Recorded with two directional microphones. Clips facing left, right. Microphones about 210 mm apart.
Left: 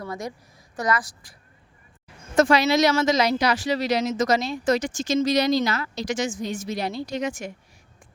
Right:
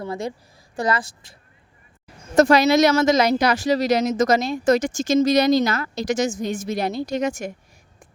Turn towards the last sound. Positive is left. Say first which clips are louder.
# right 4 dB
turn(degrees=-45)  # may be behind; listen again after turning